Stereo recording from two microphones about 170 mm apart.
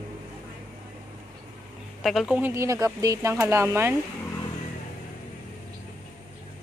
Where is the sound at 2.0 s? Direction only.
5° right (ahead or behind).